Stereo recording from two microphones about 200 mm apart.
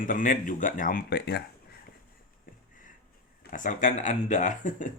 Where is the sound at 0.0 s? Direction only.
40° left (ahead or behind).